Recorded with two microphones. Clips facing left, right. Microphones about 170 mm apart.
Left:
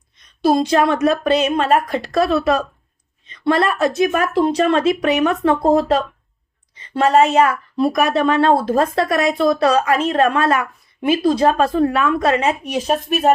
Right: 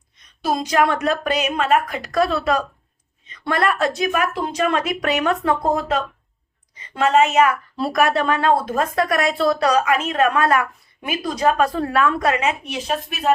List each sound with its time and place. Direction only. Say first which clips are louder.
0.4 s a woman's voice: left 4 dB; 30° left (ahead or behind)
7.8 s speech: left 3 dB; 20° left (ahead or behind); by 13.3 s 45° left (ahead or behind)